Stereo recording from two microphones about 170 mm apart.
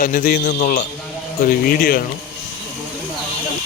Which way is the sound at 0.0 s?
55° left (ahead or behind).